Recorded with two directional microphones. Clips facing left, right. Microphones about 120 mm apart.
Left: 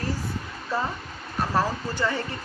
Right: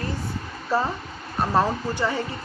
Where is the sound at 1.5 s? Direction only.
15° right (ahead or behind).